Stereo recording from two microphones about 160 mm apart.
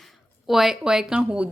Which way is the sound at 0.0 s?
Centre (ahead or behind).